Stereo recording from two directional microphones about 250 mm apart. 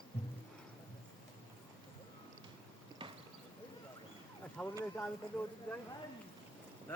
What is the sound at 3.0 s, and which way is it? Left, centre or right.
Clip-clop, centre.